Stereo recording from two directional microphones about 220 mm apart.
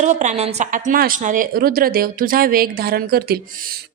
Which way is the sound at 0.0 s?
35° right (ahead or behind).